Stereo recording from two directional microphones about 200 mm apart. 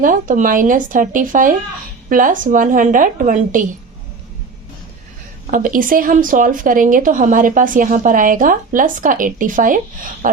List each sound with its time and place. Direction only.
0.0 s speech: 40° right (ahead or behind)
5.5 s speech: 40° right (ahead or behind)
10.2 s a sound: 40° right (ahead or behind)